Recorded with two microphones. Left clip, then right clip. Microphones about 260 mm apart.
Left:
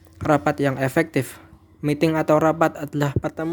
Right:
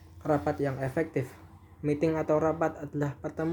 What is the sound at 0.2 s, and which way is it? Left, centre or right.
Speech, left.